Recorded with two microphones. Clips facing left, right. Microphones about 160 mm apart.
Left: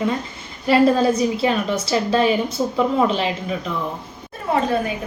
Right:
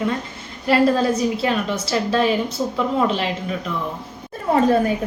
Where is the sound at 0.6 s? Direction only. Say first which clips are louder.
Left 2 dB; centre (ahead or behind).